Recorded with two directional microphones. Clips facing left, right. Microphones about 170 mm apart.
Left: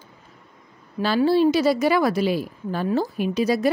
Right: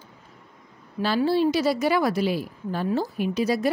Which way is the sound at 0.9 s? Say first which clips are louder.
Left 3 dB; 90° left.